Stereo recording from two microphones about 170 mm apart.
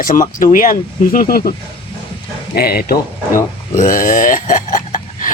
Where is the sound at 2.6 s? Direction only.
65° left (ahead or behind).